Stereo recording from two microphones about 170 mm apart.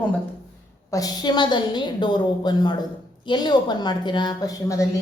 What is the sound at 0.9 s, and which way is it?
A woman's voice, 20° left (ahead or behind).